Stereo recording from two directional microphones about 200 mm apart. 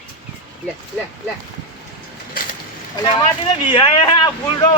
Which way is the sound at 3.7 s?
25° left (ahead or behind).